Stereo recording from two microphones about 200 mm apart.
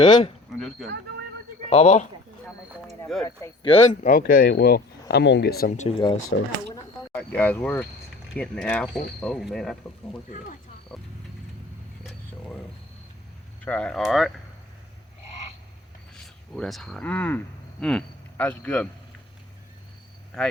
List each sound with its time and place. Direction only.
0.0 s speech: 25° left (ahead or behind)
0.8 s speech: centre (ahead or behind)
1.7 s speech: 30° left (ahead or behind)
3.2 s speech: 15° left (ahead or behind)
3.7 s speech: 30° left (ahead or behind)
4.2 s speech: 50° left (ahead or behind)
5.7 s speech: 35° left (ahead or behind)
6.3 s speech: 65° left (ahead or behind)
7.2 s speech: 10° left (ahead or behind)
12.0 s a sound: 5° left (ahead or behind)
13.7 s speech: 5° left (ahead or behind)
16.1 s speech: centre (ahead or behind)